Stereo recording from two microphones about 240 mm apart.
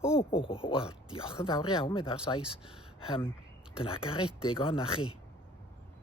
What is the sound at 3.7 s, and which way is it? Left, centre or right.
Speech, left.